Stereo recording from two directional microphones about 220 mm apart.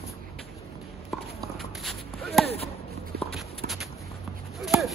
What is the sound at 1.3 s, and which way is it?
Walk, centre (ahead or behind).